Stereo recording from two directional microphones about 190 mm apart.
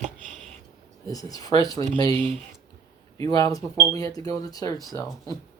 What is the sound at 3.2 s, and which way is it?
Speech, 20° left (ahead or behind).